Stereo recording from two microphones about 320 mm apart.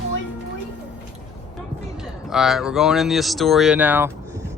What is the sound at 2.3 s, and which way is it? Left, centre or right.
Speech, centre.